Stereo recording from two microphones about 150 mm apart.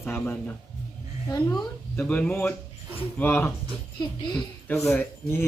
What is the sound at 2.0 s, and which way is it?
Speech, 10° left (ahead or behind).